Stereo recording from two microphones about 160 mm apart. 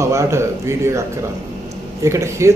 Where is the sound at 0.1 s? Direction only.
20° right (ahead or behind).